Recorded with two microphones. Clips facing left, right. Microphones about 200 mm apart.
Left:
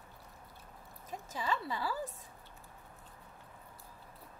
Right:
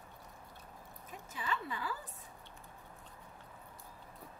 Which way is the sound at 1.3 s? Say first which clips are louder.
Left 3 dB; 35° left (ahead or behind).